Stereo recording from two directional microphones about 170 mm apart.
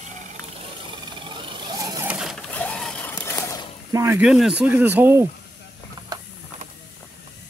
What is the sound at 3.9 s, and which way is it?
Speech, 20° right (ahead or behind).